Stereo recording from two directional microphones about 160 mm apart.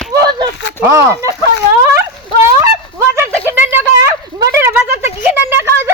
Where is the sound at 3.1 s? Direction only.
15° right (ahead or behind).